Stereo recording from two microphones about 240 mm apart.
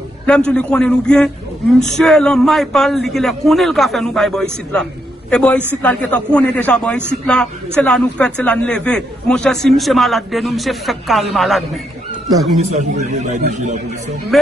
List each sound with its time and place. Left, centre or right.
0.3 s a man's voice: centre
12.5 s a man's voice: right
14.3 s a man's voice: centre